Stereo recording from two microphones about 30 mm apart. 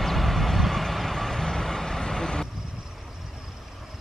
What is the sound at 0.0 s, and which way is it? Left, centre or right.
Vehicle, centre.